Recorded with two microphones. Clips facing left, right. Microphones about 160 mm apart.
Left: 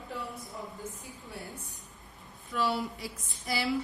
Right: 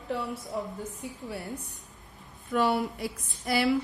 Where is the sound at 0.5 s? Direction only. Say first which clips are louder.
Right 10 dB; 75° right (ahead or behind).